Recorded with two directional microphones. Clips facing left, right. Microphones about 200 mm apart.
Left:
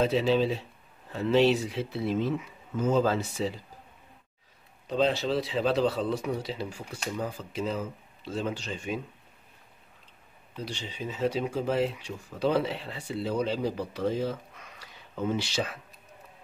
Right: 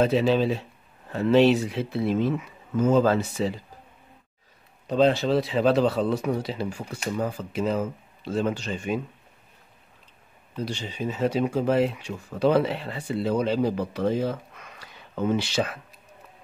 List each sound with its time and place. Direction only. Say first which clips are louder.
0.0 s speech: right 3 dB; 55° right (ahead or behind)
4.8 s a man's voice: right 5 dB; 50° right (ahead or behind)
10.6 s speech: right 6 dB; 50° right (ahead or behind)